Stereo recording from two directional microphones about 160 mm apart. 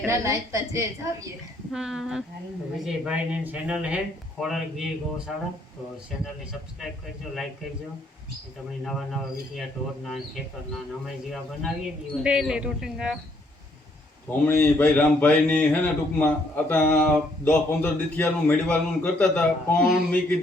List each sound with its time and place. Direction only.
0.0 s a woman's voice: 20° right (ahead or behind)
1.7 s speech: 5° right (ahead or behind)
11.0 s speech: centre (ahead or behind)
14.3 s speech: 10° left (ahead or behind)